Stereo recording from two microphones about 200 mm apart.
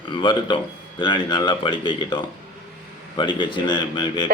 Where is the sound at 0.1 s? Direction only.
25° left (ahead or behind).